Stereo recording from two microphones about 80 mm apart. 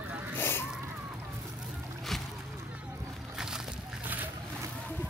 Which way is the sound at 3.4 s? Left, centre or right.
Centre.